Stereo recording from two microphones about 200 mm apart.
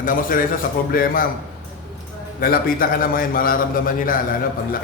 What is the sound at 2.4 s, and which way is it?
A man's voice, 45° left (ahead or behind).